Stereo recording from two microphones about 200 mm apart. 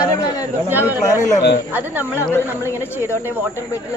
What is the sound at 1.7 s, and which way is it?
Speech, 10° right (ahead or behind).